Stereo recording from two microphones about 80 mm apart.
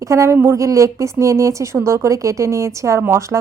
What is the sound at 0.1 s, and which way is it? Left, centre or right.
A woman's voice, right.